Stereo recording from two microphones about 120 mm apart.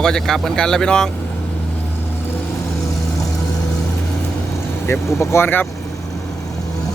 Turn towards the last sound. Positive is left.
turn(degrees=20)  # may be behind; listen again after turning